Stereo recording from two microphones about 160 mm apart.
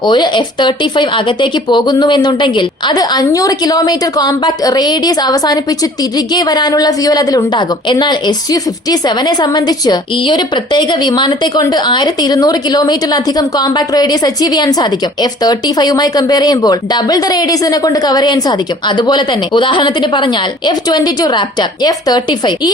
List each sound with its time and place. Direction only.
0.0 s speech: 30° left (ahead or behind)